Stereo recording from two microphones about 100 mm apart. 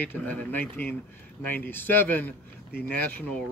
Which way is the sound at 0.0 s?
15° left (ahead or behind).